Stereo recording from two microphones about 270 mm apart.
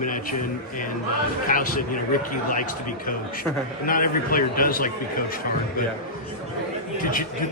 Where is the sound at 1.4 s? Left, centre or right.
Left.